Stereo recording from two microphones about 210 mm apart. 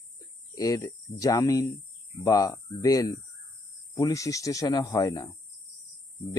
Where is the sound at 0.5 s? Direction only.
15° left (ahead or behind).